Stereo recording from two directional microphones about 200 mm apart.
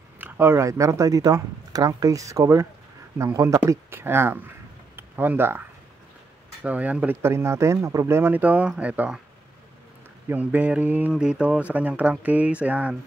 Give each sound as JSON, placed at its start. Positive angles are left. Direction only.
{"t": 0.2, "sound": "speech", "side_deg": -10}
{"t": 4.9, "sound": "a sound", "side_deg": -10}
{"t": 6.6, "sound": "speech", "side_deg": -5}
{"t": 10.2, "sound": "speech", "side_deg": -10}